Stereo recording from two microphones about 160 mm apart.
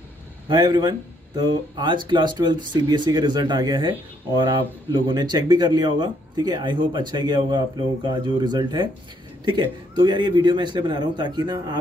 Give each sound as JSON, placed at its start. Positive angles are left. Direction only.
{"t": 0.5, "sound": "speech", "side_deg": -25}
{"t": 4.9, "sound": "speech", "side_deg": -30}